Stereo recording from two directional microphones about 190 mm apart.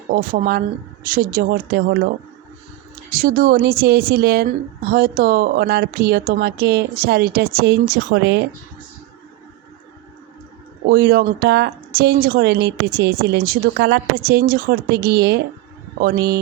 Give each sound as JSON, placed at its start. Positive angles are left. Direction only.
{"t": 0.1, "sound": "a woman's voice", "side_deg": -50}
{"t": 3.1, "sound": "a woman's voice", "side_deg": -50}
{"t": 10.8, "sound": "a woman's voice", "side_deg": -55}
{"t": 11.4, "sound": "a woman's voice", "side_deg": -60}